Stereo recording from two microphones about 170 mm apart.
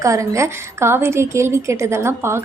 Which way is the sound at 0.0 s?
20° right (ahead or behind).